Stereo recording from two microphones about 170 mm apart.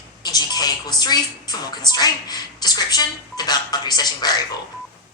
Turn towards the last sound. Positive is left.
turn(degrees=25)  # may be behind; listen again after turning